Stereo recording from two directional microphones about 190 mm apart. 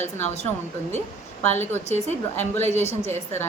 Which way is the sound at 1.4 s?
10° left (ahead or behind).